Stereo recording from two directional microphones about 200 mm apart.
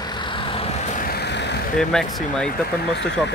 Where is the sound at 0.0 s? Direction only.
20° left (ahead or behind); by 1.6 s 60° left (ahead or behind).